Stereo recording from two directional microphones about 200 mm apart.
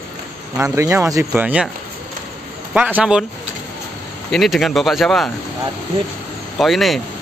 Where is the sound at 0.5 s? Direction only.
15° right (ahead or behind).